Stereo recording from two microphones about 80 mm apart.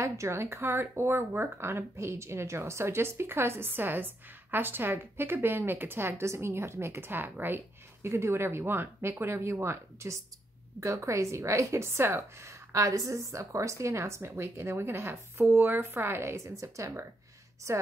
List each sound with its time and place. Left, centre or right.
0.0 s speech: right